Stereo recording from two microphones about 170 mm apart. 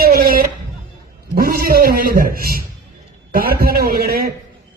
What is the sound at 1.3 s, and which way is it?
A man's voice, 60° right (ahead or behind).